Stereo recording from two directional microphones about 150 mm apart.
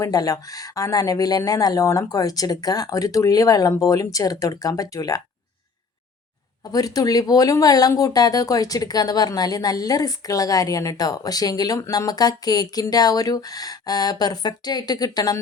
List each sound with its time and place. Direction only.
0.0 s speech: 25° left (ahead or behind)
6.7 s speech: 25° left (ahead or behind)